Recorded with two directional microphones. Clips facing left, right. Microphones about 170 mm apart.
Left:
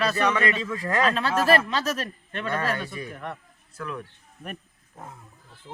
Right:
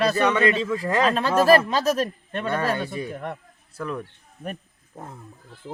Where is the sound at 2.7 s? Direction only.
30° right (ahead or behind).